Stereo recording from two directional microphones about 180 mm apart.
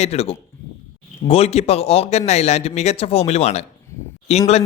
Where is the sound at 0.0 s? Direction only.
35° left (ahead or behind).